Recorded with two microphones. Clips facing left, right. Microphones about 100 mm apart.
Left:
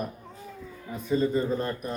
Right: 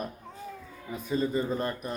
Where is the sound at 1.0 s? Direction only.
15° right (ahead or behind).